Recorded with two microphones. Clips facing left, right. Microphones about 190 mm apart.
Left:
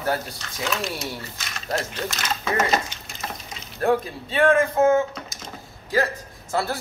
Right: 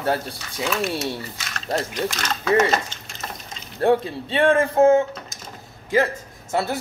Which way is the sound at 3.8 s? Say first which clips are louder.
Right 3 dB; 30° right (ahead or behind).